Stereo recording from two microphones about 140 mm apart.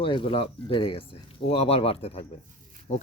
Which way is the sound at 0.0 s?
40° left (ahead or behind).